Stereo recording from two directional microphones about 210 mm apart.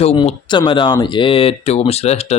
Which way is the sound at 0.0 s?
30° left (ahead or behind).